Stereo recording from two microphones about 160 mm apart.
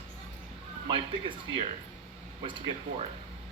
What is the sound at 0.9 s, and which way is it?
Speech, 30° right (ahead or behind).